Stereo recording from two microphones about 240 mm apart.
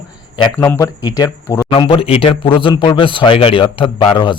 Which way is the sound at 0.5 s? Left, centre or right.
Centre.